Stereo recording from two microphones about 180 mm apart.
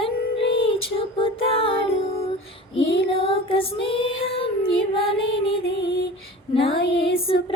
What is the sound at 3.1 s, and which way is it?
Child singing, 30° left (ahead or behind).